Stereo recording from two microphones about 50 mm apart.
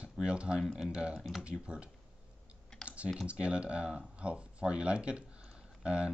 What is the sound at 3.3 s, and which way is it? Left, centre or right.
Speech, right.